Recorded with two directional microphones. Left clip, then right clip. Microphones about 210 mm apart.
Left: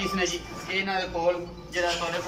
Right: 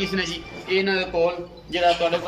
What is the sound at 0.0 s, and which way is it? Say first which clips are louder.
A woman's voice: right 2 dB; 55° right (ahead or behind).